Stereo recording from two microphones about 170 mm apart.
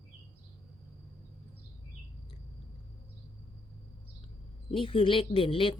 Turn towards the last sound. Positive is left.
turn(degrees=30)  # may be behind; listen again after turning